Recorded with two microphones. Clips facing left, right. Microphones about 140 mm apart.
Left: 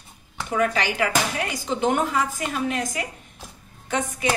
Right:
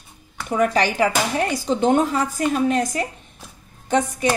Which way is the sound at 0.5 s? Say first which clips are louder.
Right 4 dB; 40° right (ahead or behind).